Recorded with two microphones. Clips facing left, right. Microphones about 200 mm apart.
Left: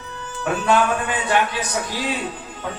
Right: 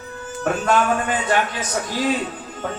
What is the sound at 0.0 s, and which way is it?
A man's voice, 40° right (ahead or behind).